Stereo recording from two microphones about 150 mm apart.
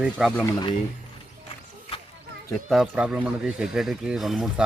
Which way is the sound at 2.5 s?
Centre (ahead or behind).